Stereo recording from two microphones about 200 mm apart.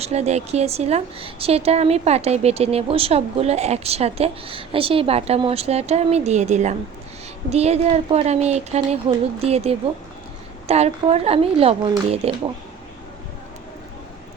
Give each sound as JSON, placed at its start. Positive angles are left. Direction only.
{"t": 0.0, "sound": "speech", "side_deg": -35}